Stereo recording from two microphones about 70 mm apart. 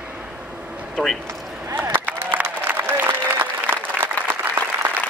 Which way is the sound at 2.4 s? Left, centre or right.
Right.